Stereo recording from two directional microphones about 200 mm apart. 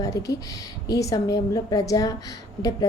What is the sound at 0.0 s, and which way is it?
A woman's voice, 15° left (ahead or behind).